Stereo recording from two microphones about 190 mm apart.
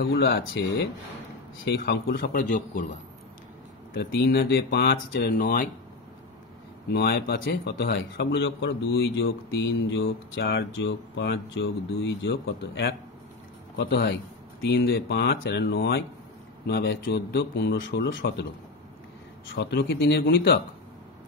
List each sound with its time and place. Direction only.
0.0 s a man's voice: 55° left (ahead or behind)
2.5 s a man's voice: 40° left (ahead or behind)
3.9 s a man's voice: 55° left (ahead or behind)
6.9 s a man's voice: 60° left (ahead or behind)
19.5 s a man's voice: 60° left (ahead or behind)